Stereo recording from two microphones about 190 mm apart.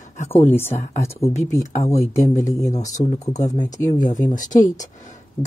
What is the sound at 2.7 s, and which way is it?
Speech, 40° left (ahead or behind).